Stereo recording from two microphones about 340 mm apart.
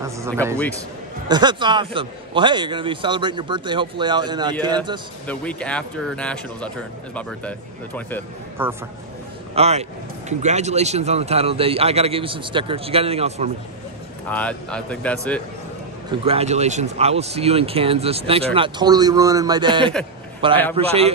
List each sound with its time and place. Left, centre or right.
1.3 s speech: centre
5.2 s speech: centre
8.6 s speech: centre
9.6 s speech: centre
14.3 s speech: centre
16.1 s speech: centre